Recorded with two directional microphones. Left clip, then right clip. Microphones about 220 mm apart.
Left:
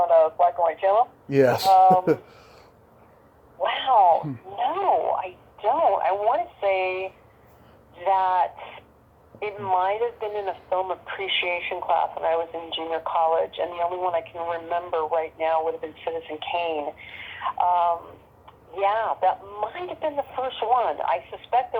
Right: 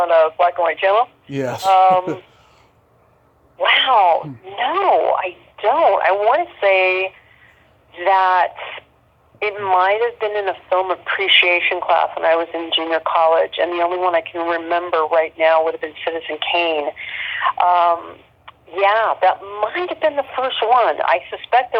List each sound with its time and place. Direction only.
0.0 s speech: 25° right (ahead or behind)
1.3 s speech: 10° left (ahead or behind)
1.6 s speech: 25° right (ahead or behind)
3.6 s speech: 25° right (ahead or behind)